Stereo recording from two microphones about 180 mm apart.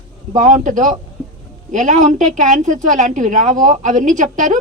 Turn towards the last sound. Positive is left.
turn(degrees=-45)  # may be behind; listen again after turning